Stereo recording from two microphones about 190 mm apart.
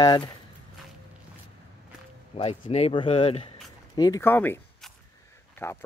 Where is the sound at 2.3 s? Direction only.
35° left (ahead or behind).